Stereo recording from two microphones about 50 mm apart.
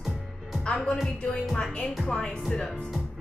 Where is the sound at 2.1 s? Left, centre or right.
Centre.